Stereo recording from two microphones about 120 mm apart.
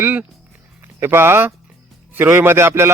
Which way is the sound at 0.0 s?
15° right (ahead or behind).